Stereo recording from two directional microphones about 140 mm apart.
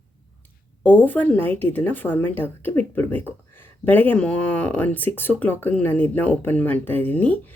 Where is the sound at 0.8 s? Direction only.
10° left (ahead or behind).